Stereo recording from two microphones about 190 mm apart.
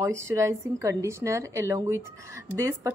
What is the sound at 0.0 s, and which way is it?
A woman's voice, 15° right (ahead or behind).